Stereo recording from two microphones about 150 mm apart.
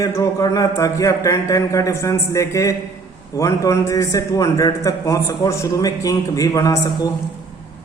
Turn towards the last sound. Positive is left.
turn(degrees=20)  # may be behind; listen again after turning